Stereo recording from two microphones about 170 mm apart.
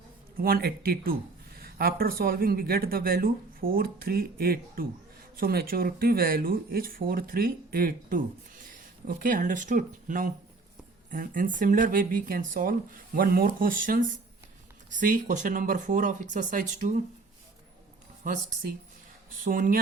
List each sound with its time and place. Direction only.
0.3 s speech: 60° right (ahead or behind)
19.5 s speech: 50° right (ahead or behind)